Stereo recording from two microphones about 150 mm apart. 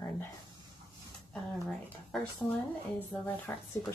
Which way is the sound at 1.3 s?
Centre (ahead or behind).